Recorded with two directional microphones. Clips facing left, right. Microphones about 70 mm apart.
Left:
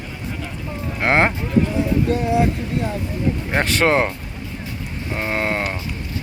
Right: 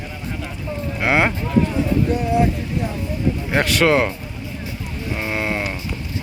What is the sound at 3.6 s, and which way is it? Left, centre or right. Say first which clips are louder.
Speech: right 1 dB; left.